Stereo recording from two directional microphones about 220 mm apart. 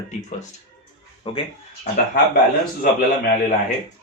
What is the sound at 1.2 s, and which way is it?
Speech, 25° left (ahead or behind).